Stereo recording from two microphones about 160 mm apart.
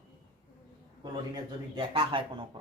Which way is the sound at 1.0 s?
30° right (ahead or behind).